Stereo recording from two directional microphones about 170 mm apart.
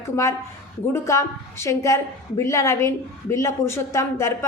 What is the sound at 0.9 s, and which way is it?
A woman's voice, 15° left (ahead or behind).